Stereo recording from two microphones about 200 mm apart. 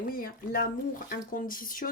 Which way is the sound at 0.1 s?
45° left (ahead or behind).